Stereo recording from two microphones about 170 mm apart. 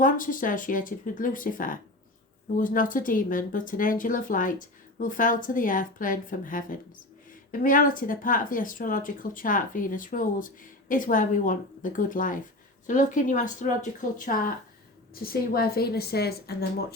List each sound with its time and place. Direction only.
0.0 s speech: 50° left (ahead or behind)
15.1 s a woman's voice: 60° left (ahead or behind)